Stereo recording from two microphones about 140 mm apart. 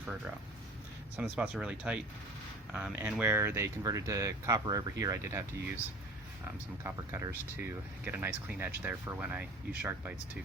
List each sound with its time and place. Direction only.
1.1 s speech: 10° right (ahead or behind)
6.8 s speech: 20° right (ahead or behind)